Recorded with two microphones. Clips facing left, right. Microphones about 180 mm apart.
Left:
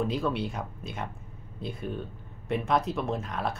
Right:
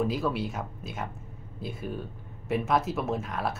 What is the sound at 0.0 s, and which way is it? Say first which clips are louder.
Speech: even; 5° right (ahead or behind).